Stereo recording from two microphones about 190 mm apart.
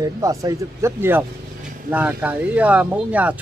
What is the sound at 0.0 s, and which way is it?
Speech, 15° right (ahead or behind).